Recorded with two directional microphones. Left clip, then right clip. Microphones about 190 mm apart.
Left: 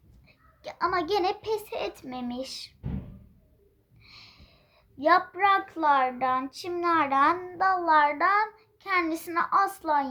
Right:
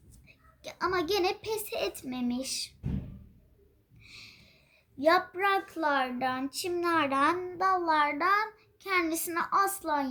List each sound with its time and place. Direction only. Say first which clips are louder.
0.3 s a woman's voice: left 4 dB; 10° left (ahead or behind)
4.0 s a sound: right 1 dB; 10° left (ahead or behind)
4.9 s a child's voice: left 3 dB; 10° left (ahead or behind)